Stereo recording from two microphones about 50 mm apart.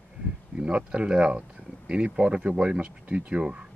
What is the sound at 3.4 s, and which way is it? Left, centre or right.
Speech, centre.